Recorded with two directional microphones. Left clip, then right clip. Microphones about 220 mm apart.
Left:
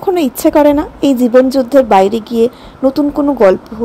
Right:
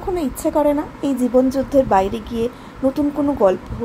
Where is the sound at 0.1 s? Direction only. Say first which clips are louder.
Left 9 dB; 40° left (ahead or behind).